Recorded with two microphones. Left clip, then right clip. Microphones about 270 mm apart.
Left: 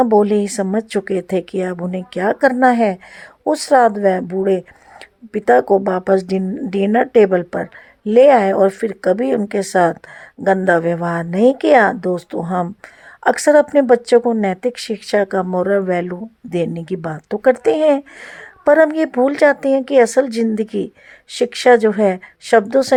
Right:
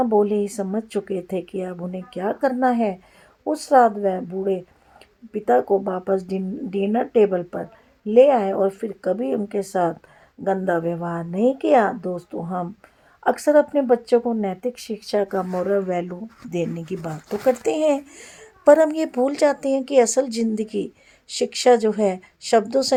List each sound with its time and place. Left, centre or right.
0.0 s speech: left